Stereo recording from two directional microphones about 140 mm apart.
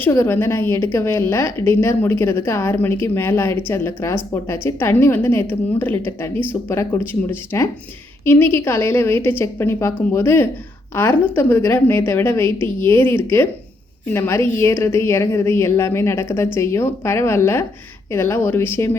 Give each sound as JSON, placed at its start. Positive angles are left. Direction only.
{"t": 0.0, "sound": "a woman's voice", "side_deg": 20}